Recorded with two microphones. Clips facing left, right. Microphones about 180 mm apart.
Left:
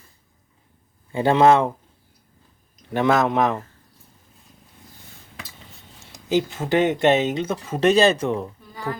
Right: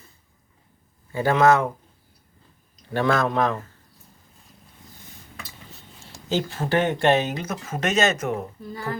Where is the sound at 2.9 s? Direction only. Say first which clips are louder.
Left 3 dB; 20° left (ahead or behind).